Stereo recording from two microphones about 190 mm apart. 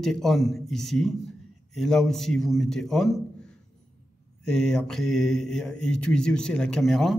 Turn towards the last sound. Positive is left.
turn(degrees=0)  # may be behind; listen again after turning